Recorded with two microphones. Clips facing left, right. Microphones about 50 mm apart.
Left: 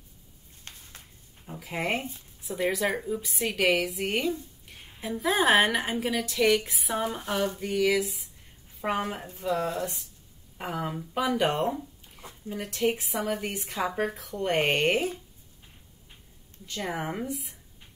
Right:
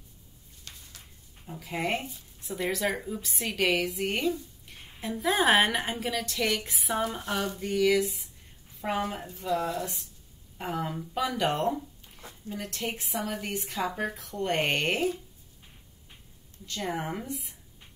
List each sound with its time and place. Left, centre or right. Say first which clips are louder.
0.7 s a sound: left 1 dB; left
1.4 s a woman's voice: even; centre
8.9 s a woman's voice: right 2 dB; left
9.5 s speech: left 1 dB; left
10.6 s speech: even; centre
16.6 s a woman's voice: even; centre